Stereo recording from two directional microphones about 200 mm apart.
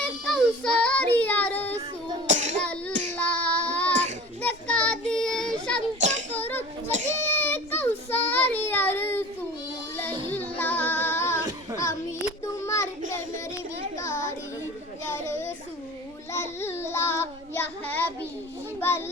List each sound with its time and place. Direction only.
0.0 s child singing: 5° left (ahead or behind)
2.2 s child singing: 40° right (ahead or behind)
3.2 s child singing: 5° left (ahead or behind)
6.0 s child singing: 35° right (ahead or behind)
6.3 s children playing: 10° left (ahead or behind)
7.2 s child singing: 10° left (ahead or behind)
10.0 s music: 10° left (ahead or behind)
10.6 s female singing: 10° left (ahead or behind)
12.5 s child singing: 15° left (ahead or behind)
15.1 s a sound: 15° left (ahead or behind)
16.3 s child singing: 15° left (ahead or behind)
18.8 s children playing: 10° left (ahead or behind)